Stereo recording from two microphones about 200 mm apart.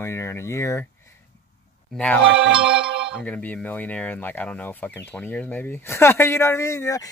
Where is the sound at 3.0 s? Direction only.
5° right (ahead or behind).